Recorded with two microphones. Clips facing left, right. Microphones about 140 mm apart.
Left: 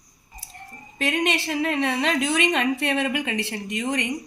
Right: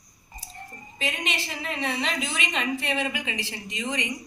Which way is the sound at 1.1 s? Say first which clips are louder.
Left 9 dB; 65° left (ahead or behind).